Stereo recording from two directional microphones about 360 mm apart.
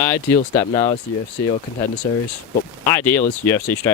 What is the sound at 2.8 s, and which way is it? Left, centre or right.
Speech, centre.